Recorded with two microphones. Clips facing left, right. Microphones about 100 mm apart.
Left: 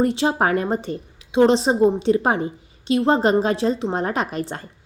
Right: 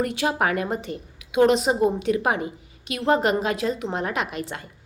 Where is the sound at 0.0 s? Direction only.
25° left (ahead or behind).